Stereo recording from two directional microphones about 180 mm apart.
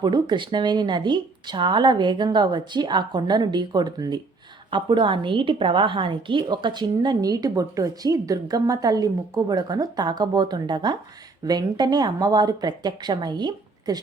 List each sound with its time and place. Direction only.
0.0 s a woman's voice: 25° right (ahead or behind)